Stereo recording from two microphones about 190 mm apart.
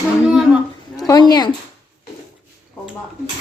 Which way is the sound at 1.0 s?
20° left (ahead or behind).